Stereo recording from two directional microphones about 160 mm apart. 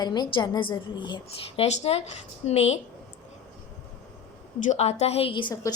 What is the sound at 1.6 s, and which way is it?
A woman's voice, 40° left (ahead or behind).